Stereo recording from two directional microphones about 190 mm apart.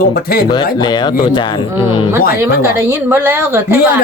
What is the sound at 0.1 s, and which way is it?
Speech, 55° left (ahead or behind).